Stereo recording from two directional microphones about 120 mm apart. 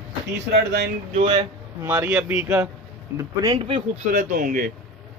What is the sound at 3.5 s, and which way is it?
Speech, 55° right (ahead or behind).